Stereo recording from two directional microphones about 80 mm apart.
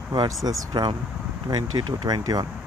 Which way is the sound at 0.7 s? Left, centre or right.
Right.